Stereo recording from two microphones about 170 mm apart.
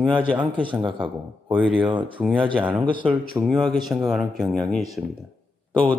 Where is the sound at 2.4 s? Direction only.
30° right (ahead or behind).